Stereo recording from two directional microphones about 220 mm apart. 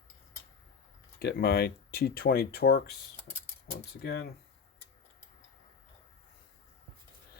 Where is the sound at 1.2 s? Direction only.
45° left (ahead or behind).